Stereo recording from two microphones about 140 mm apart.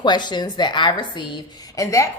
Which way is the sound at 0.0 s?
30° left (ahead or behind).